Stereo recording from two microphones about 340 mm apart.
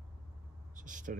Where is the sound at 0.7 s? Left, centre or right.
Right.